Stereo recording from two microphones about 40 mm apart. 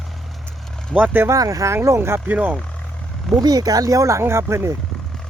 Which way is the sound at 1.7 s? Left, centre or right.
Right.